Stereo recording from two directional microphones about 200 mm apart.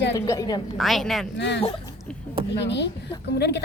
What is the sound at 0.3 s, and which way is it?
Speech, 20° left (ahead or behind).